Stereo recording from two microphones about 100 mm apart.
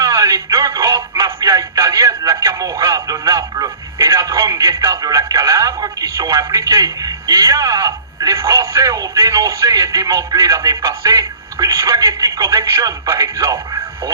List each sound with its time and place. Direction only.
0.0 s music: 35° right (ahead or behind)